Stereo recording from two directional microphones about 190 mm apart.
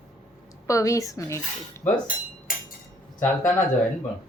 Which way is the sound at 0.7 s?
15° left (ahead or behind).